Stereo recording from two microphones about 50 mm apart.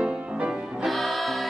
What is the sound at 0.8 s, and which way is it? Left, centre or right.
Music, centre.